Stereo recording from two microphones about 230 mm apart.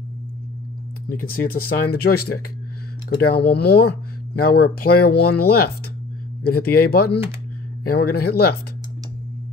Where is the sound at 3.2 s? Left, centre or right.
Left.